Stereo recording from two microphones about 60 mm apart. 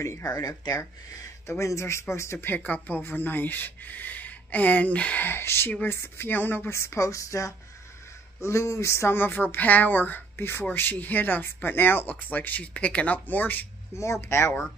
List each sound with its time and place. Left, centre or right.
0.2 s speech: left
1.5 s speech: left
5.2 s a woman's voice: left
6.7 s a woman's voice: left
13.9 s speech: left